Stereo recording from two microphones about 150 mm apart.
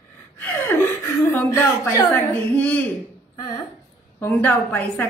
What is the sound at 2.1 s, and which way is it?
Speech, 10° left (ahead or behind).